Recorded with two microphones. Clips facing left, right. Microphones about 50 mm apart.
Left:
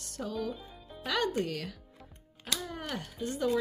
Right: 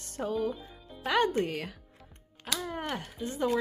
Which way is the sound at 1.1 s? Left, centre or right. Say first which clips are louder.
Right 4 dB; right.